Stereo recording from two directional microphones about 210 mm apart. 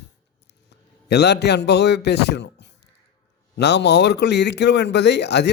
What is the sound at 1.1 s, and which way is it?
Speech, 50° left (ahead or behind).